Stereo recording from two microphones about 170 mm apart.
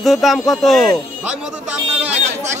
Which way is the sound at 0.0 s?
Centre (ahead or behind).